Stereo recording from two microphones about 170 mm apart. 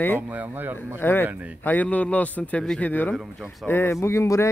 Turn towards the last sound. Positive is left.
turn(degrees=15)  # may be behind; listen again after turning